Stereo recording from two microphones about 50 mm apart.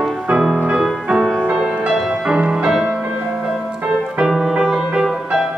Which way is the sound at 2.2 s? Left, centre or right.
Centre.